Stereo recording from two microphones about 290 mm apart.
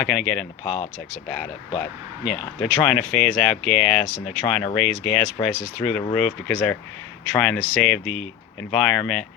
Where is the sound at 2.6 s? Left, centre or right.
Centre.